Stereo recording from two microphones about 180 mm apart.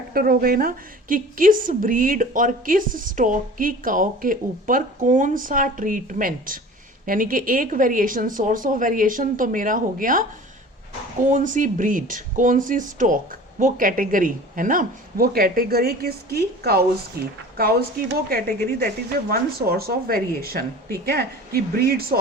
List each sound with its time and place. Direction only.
0.1 s a woman's voice: 55° right (ahead or behind)
11.3 s a woman's voice: 45° right (ahead or behind)